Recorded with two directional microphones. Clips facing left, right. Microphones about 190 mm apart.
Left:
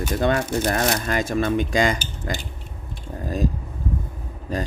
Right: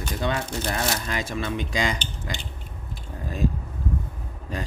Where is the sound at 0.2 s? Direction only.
50° left (ahead or behind).